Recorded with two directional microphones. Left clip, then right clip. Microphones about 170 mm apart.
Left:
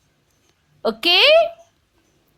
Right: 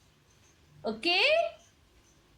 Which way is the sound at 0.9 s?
50° left (ahead or behind).